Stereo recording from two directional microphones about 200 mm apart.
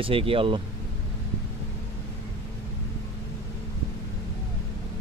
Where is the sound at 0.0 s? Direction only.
25° right (ahead or behind).